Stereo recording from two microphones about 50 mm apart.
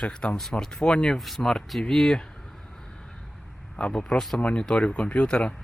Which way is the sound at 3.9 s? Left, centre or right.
Centre.